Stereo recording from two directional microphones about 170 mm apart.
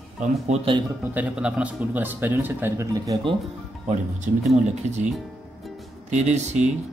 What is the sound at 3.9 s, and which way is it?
A man's voice, 45° right (ahead or behind).